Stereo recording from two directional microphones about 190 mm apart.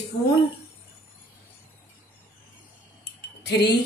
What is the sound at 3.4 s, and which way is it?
Cutlery, 60° left (ahead or behind).